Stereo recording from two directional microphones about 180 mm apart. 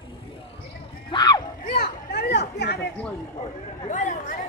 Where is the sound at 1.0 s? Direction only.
20° left (ahead or behind).